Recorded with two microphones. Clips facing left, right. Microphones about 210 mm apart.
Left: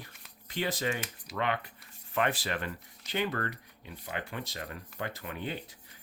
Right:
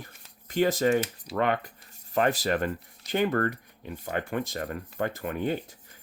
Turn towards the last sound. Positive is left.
turn(degrees=-45)  # may be behind; listen again after turning